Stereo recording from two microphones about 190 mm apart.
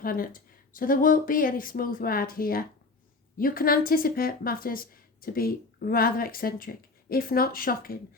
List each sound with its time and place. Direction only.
0.0 s speech: 50° left (ahead or behind)